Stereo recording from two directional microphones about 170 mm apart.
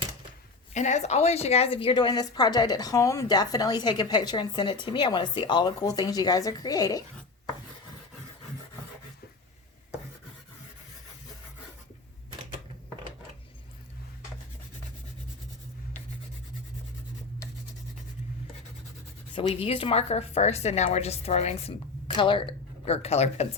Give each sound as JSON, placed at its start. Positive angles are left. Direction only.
{"t": 0.7, "sound": "a woman's voice", "side_deg": 45}
{"t": 19.3, "sound": "a woman's voice", "side_deg": 30}